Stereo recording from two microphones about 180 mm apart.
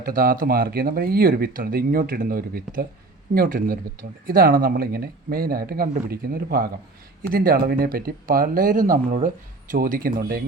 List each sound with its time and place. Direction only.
0.0 s speech: 55° right (ahead or behind)